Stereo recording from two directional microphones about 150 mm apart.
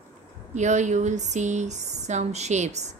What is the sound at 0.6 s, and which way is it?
A woman's voice, 50° right (ahead or behind).